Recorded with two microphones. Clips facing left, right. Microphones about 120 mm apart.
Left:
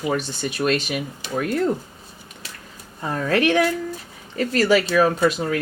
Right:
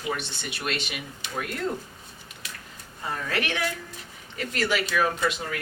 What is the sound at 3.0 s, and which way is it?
Speech, 35° left (ahead or behind).